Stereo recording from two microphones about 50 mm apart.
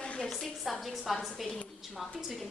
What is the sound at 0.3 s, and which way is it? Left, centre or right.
A woman's voice, centre.